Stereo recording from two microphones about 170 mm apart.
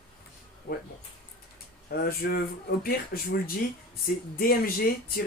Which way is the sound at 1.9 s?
60° left (ahead or behind).